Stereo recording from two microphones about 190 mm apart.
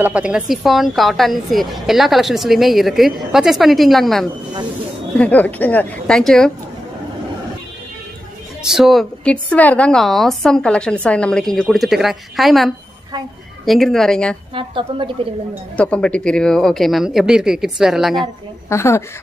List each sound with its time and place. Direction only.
0.0 s a woman's voice: 5° right (ahead or behind)
8.6 s a woman's voice: centre (ahead or behind)
14.5 s speech: 25° right (ahead or behind)
15.7 s a woman's voice: 5° left (ahead or behind)
18.7 s a woman's voice: 15° left (ahead or behind)